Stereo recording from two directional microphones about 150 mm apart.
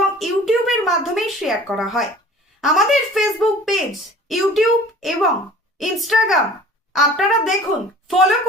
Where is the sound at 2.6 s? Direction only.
Centre (ahead or behind).